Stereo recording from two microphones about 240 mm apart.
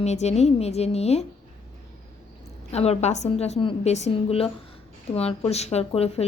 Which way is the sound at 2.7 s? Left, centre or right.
Left.